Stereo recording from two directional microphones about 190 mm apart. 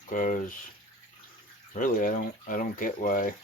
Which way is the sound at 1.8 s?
45° left (ahead or behind).